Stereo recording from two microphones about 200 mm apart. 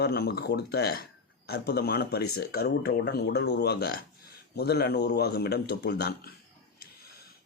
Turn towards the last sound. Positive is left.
turn(degrees=55)  # may be behind; listen again after turning